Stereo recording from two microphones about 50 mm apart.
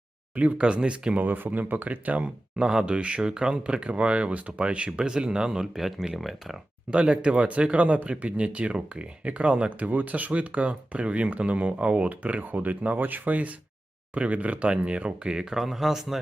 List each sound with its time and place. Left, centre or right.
0.6 s speech: right
1.1 s speech: right; by 6.6 s centre
6.9 s speech: right
15.3 s speech: centre